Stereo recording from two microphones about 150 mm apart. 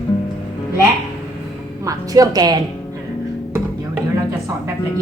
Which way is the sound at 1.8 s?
20° right (ahead or behind).